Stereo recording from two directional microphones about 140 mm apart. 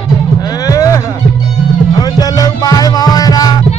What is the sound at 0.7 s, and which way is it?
Music, 25° left (ahead or behind).